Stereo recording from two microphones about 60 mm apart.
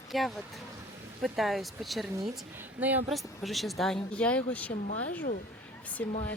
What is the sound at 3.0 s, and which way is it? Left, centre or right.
Speech, centre.